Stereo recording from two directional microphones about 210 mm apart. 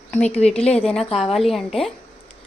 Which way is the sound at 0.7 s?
5° left (ahead or behind).